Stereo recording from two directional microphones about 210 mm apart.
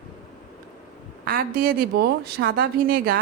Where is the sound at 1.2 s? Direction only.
45° right (ahead or behind).